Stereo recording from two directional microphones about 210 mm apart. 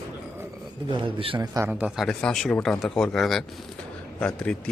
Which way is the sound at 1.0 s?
25° right (ahead or behind).